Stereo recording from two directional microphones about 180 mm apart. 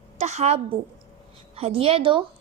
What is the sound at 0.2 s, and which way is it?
A woman's voice, 40° right (ahead or behind).